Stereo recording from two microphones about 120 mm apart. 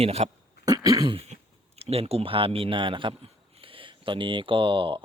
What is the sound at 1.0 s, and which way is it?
Speech, 50° right (ahead or behind).